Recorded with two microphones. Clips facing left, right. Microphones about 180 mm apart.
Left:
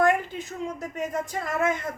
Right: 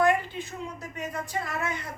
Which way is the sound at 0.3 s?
45° left (ahead or behind).